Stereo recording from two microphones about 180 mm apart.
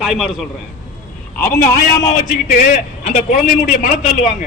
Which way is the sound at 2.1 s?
45° left (ahead or behind).